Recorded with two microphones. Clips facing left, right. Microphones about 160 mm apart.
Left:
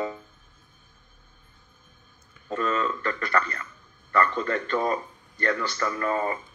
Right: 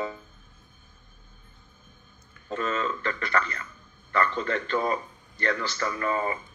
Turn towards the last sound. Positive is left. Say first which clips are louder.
# left 1 dB
turn(degrees=40)  # may be behind; listen again after turning